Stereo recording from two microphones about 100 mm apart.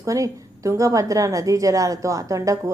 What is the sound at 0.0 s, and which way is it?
A woman's voice, 35° right (ahead or behind).